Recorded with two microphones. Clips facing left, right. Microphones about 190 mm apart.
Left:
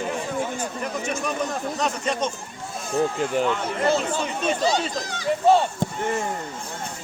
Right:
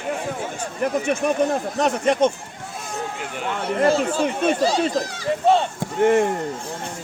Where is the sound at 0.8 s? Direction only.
55° right (ahead or behind).